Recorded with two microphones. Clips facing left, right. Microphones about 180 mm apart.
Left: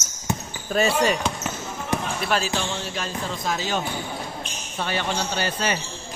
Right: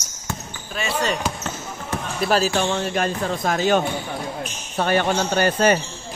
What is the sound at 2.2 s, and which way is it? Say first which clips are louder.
Speech: right 10 dB; 40° right (ahead or behind).